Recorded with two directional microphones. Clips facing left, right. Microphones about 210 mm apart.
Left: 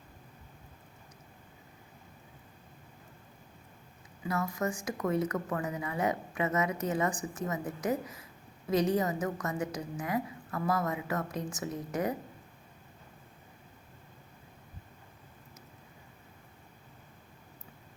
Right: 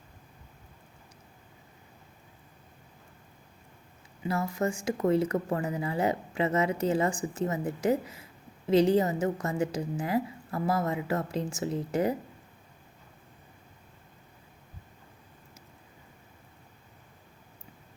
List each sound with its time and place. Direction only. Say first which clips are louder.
4.2 s a woman's voice: right 3 dB; 25° right (ahead or behind)